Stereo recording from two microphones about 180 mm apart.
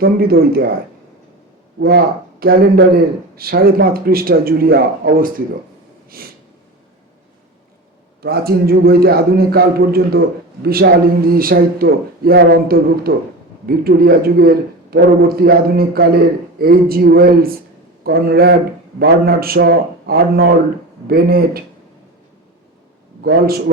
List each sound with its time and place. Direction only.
0.0 s speech: 55° right (ahead or behind)
1.8 s speech: 60° right (ahead or behind)
8.2 s speech: 55° right (ahead or behind)
23.2 s speech: 60° right (ahead or behind)